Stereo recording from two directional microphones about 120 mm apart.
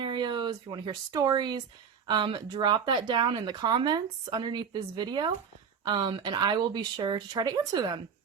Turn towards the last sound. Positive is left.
turn(degrees=-35)  # may be behind; listen again after turning